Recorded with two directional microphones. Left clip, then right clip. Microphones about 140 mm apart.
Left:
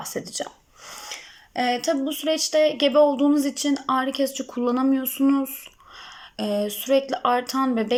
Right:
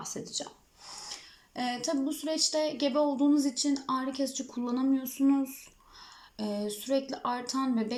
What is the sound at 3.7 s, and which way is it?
Speech, 25° right (ahead or behind).